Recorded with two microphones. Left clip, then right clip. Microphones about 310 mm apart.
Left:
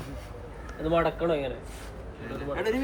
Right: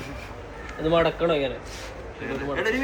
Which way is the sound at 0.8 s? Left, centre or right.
Right.